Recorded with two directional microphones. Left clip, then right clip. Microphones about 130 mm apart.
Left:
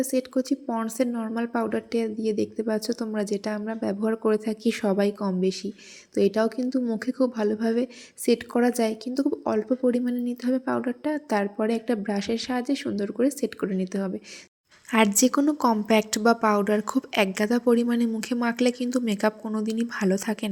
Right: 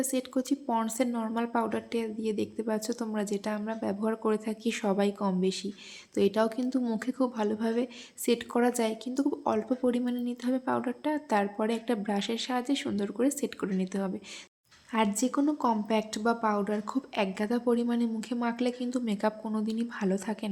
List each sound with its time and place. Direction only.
0.0 s speech: 25° left (ahead or behind)